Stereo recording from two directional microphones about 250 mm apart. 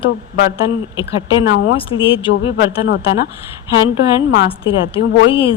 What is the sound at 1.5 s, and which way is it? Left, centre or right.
Speech, left.